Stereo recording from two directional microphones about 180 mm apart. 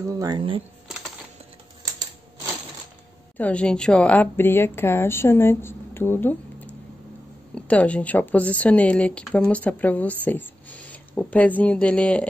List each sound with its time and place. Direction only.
0.0 s speech: 20° right (ahead or behind)
3.3 s speech: 5° left (ahead or behind)